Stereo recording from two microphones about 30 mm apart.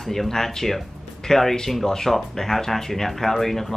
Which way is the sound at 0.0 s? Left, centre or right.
Centre.